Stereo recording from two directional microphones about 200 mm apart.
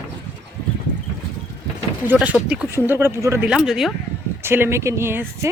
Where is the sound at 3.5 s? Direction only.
5° right (ahead or behind).